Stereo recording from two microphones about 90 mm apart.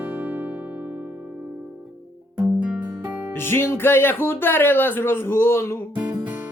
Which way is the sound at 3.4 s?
25° left (ahead or behind).